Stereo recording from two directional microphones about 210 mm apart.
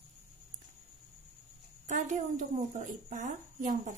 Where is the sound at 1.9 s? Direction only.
35° right (ahead or behind).